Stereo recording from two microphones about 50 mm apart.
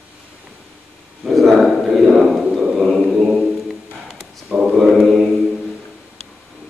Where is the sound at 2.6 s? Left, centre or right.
Centre.